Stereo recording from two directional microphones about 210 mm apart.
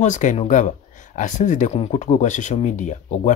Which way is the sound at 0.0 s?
35° left (ahead or behind).